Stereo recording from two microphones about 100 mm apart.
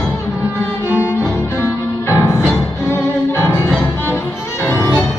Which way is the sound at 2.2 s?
25° left (ahead or behind).